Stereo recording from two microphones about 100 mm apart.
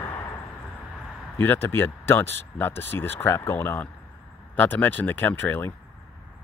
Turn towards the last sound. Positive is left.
turn(degrees=20)  # may be behind; listen again after turning